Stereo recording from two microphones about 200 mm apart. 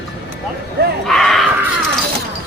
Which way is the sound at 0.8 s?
55° right (ahead or behind).